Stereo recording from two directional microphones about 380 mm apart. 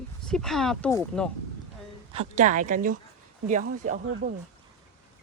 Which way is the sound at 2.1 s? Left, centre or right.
Centre.